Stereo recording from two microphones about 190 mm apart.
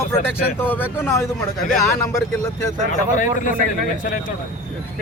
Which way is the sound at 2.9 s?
45° left (ahead or behind).